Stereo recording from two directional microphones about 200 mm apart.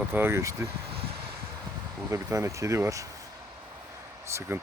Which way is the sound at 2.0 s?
15° right (ahead or behind).